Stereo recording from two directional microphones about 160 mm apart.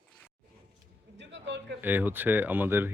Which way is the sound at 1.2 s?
90° right.